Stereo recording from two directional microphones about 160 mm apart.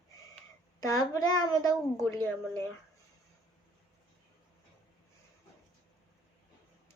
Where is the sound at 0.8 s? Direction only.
20° left (ahead or behind).